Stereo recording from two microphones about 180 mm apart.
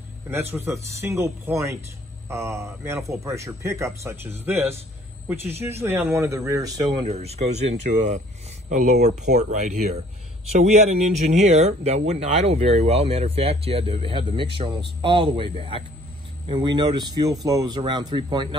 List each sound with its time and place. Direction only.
0.3 s a man's voice: 10° right (ahead or behind)
7.1 s speech: 35° right (ahead or behind)